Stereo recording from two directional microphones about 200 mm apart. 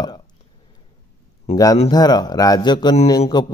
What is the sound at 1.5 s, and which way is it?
A man's voice, 20° left (ahead or behind).